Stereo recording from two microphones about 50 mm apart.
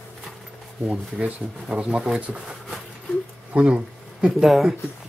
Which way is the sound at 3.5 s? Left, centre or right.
Right.